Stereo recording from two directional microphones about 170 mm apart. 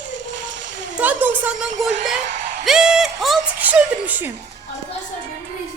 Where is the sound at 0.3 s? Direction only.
50° right (ahead or behind).